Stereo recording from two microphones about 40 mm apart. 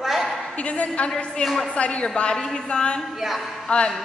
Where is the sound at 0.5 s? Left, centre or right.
Left.